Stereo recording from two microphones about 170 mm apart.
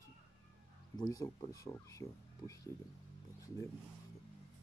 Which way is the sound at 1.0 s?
25° left (ahead or behind).